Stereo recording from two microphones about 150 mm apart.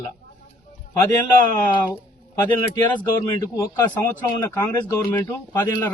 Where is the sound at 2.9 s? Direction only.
25° left (ahead or behind).